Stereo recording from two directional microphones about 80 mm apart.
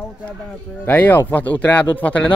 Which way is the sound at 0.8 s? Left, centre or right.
Left.